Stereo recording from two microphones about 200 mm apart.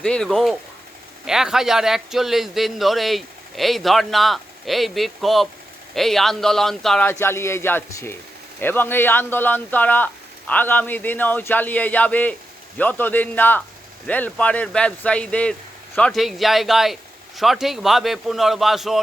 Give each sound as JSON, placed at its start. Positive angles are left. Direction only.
{"t": 0.0, "sound": "a man's voice", "side_deg": 5}